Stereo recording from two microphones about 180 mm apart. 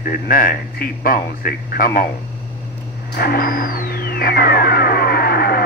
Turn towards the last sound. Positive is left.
turn(degrees=60)  # may be behind; listen again after turning